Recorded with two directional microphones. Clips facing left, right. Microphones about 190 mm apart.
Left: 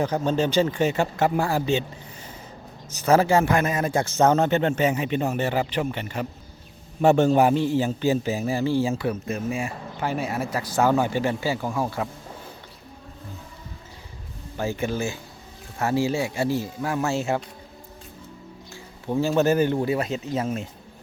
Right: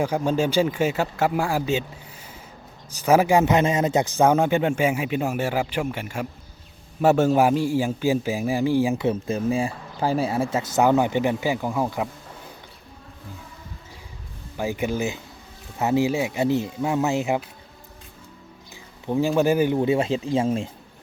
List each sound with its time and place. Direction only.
0.0 s a man's voice: 10° right (ahead or behind)
3.0 s a man's voice: 10° right (ahead or behind)
14.6 s a man's voice: 15° right (ahead or behind)
18.7 s music: 15° right (ahead or behind)
19.4 s a man's voice: 10° right (ahead or behind)
19.8 s speech: 25° right (ahead or behind)